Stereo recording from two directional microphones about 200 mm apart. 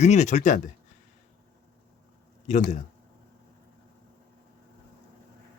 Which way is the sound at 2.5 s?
35° left (ahead or behind).